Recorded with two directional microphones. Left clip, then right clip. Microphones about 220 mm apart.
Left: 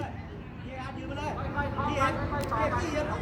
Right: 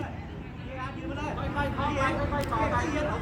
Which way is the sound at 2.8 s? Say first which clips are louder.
Right 1 dB; 50° left (ahead or behind).